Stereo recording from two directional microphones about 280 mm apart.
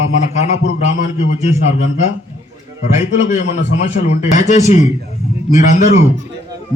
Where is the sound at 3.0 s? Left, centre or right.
Left.